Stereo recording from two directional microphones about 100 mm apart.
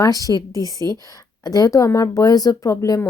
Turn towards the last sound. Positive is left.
turn(degrees=30)  # may be behind; listen again after turning